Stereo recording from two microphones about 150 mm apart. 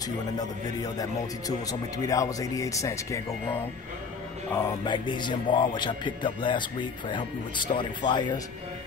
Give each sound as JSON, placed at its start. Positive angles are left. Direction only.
{"t": 0.4, "sound": "speech", "side_deg": 25}
{"t": 4.8, "sound": "a man's voice", "side_deg": 30}